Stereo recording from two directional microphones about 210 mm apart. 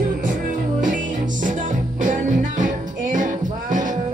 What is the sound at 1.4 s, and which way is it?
Music, 40° right (ahead or behind).